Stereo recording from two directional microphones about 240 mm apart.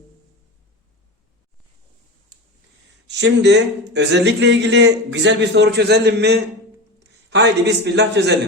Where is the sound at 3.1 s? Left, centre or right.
Right.